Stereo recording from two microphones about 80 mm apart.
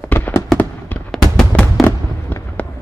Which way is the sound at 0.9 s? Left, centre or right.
Centre.